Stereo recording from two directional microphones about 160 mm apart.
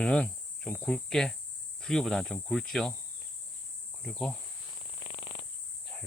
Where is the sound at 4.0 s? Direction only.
5° left (ahead or behind).